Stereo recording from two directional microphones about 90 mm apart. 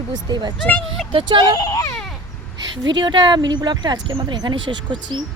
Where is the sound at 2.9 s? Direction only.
60° right (ahead or behind).